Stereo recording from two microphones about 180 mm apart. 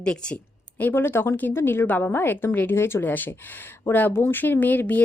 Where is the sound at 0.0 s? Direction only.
5° left (ahead or behind).